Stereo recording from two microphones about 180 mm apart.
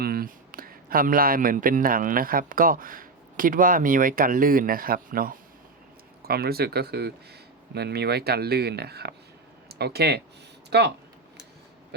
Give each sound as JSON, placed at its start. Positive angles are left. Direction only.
{"t": 0.0, "sound": "a man's voice", "side_deg": -55}